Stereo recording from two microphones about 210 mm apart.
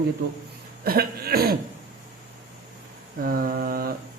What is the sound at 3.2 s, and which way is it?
Mantra, 45° right (ahead or behind).